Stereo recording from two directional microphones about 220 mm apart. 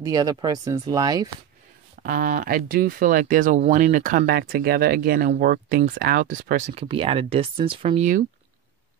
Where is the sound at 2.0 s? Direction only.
40° right (ahead or behind).